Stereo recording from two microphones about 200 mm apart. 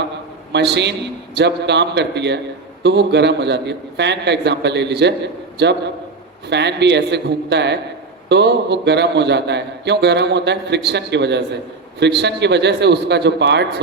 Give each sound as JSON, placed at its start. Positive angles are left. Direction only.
{"t": 0.5, "sound": "a man's voice", "side_deg": -60}
{"t": 6.5, "sound": "a man's voice", "side_deg": -60}